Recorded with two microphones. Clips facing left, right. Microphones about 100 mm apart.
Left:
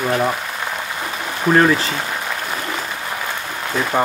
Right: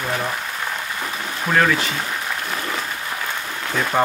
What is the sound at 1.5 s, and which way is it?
Speech, 30° left (ahead or behind).